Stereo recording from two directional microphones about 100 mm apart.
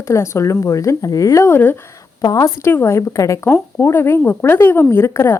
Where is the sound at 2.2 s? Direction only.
35° left (ahead or behind).